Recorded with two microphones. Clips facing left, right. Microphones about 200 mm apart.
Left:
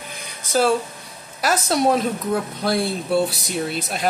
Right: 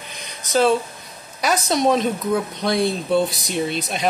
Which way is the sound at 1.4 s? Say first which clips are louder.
Even; 5° left (ahead or behind).